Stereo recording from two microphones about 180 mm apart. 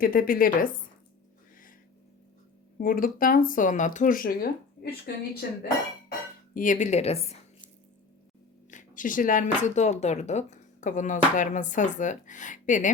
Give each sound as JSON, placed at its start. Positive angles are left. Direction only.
{"t": 0.0, "sound": "speech", "side_deg": 55}
{"t": 2.7, "sound": "speech", "side_deg": 50}
{"t": 6.1, "sound": "speech", "side_deg": 50}
{"t": 8.7, "sound": "speech", "side_deg": 45}